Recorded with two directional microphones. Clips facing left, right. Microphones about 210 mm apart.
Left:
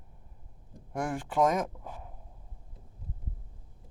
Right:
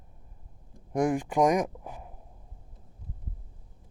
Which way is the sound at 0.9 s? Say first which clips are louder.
Right 7 dB; 15° right (ahead or behind).